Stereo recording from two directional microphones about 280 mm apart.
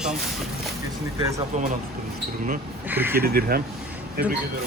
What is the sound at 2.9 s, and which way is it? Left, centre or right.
Speech, centre.